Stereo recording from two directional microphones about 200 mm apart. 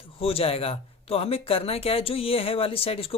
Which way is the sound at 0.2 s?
30° left (ahead or behind).